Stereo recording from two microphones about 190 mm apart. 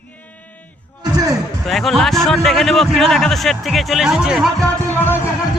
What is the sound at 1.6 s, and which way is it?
A man's voice, centre (ahead or behind).